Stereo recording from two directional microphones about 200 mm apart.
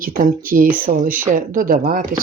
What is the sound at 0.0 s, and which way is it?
Speech, 45° right (ahead or behind).